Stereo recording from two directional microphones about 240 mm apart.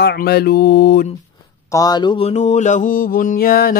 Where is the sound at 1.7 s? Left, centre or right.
Centre; by 3.7 s left.